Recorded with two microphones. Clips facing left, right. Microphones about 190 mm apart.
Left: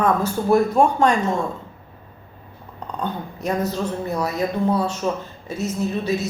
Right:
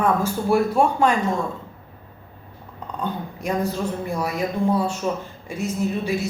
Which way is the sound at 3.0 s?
10° right (ahead or behind).